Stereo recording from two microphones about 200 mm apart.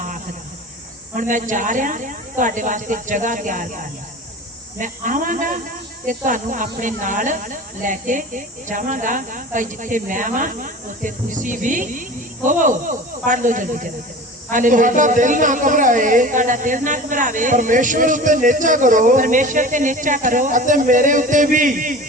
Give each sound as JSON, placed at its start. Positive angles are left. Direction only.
{"t": 1.1, "sound": "a woman's voice", "side_deg": -40}